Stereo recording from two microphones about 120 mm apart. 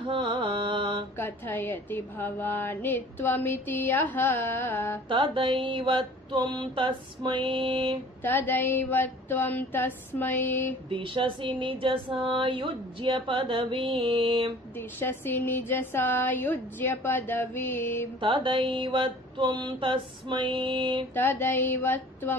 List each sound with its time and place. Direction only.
0.0 s music: 45° right (ahead or behind)
1.1 s a woman's voice: 15° left (ahead or behind)
5.0 s mantra: 45° right (ahead or behind)
8.2 s a woman's voice: 15° left (ahead or behind)
10.9 s mantra: 45° right (ahead or behind)
14.8 s a woman's voice: 20° left (ahead or behind)
18.2 s mantra: 45° right (ahead or behind)
21.1 s a woman's voice: 20° left (ahead or behind)